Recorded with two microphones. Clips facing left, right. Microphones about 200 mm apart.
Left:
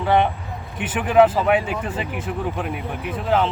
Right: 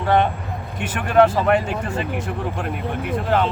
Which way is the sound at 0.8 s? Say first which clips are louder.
Left 1 dB; 5° left (ahead or behind).